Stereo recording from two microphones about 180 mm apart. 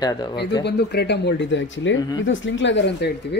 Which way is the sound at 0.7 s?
65° left (ahead or behind).